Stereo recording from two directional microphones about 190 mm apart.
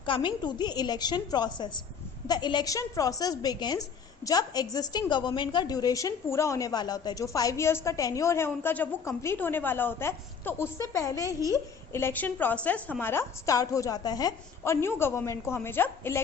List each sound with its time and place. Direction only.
0.0 s a woman's voice: 25° left (ahead or behind)